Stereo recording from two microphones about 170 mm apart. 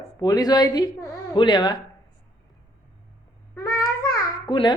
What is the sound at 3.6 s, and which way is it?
Babbling, 15° left (ahead or behind).